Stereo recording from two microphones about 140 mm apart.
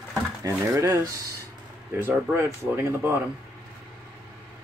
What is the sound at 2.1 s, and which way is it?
Speech, 15° right (ahead or behind).